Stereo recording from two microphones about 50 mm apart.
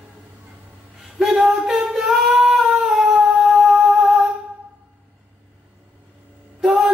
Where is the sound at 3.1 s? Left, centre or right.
Centre.